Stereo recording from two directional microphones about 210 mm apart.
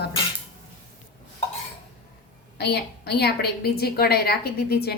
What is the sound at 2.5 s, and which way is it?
A woman's voice, 50° left (ahead or behind).